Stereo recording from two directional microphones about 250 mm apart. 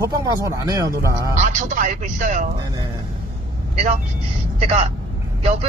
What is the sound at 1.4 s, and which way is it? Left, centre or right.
Speech, right.